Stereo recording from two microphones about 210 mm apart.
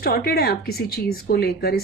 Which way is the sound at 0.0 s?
45° left (ahead or behind).